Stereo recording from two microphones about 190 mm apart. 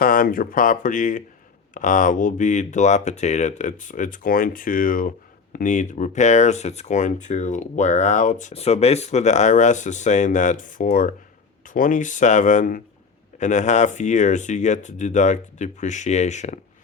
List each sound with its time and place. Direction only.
0.0 s speech: 50° left (ahead or behind)